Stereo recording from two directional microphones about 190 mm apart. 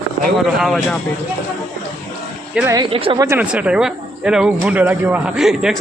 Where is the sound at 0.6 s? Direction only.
Centre (ahead or behind).